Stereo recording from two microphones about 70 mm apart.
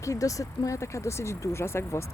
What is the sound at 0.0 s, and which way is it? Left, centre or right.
Speech, left.